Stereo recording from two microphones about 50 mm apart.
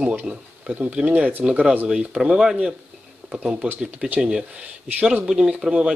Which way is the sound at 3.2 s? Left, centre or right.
Right.